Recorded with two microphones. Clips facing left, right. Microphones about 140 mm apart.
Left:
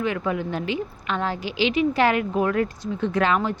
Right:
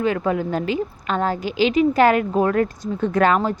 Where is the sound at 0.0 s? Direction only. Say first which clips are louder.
Right 4 dB; 40° right (ahead or behind).